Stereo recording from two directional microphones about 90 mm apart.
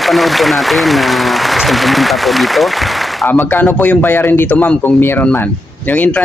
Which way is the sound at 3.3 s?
20° left (ahead or behind).